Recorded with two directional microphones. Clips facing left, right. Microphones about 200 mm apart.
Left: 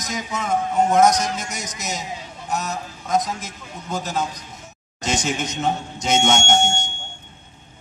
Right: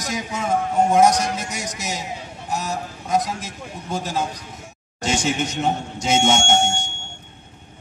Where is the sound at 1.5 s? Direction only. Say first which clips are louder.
Right 2 dB; 30° right (ahead or behind).